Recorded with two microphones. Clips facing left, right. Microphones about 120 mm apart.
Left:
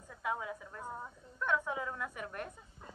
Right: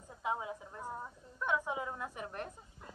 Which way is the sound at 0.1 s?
25° right (ahead or behind).